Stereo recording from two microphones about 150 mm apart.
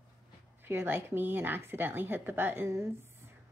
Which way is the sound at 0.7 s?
15° right (ahead or behind).